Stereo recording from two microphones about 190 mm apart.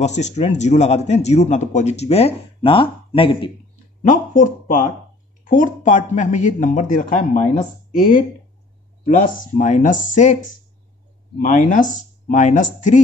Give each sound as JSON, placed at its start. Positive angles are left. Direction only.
{"t": 0.0, "sound": "speech", "side_deg": 35}
{"t": 4.1, "sound": "speech", "side_deg": 40}